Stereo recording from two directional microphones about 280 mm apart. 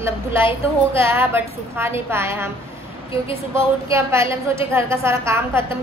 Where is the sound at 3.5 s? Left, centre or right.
Centre.